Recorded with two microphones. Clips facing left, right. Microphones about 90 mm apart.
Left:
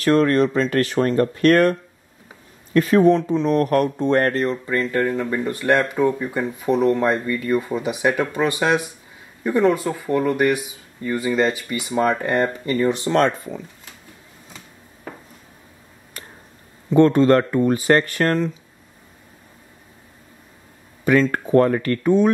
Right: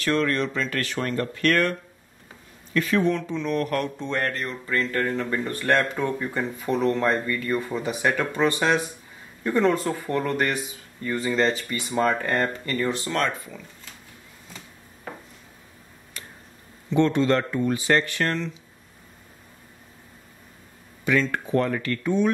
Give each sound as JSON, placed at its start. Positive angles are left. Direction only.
{"t": 0.0, "sound": "speech", "side_deg": 40}
{"t": 4.4, "sound": "speech", "side_deg": 30}
{"t": 4.7, "sound": "speech", "side_deg": 15}
{"t": 16.9, "sound": "speech", "side_deg": 45}
{"t": 21.0, "sound": "speech", "side_deg": 45}